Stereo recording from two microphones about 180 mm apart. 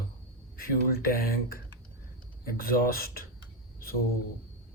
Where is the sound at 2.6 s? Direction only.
55° left (ahead or behind).